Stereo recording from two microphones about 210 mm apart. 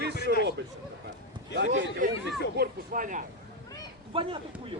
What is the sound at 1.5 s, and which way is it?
Speech, 60° right (ahead or behind).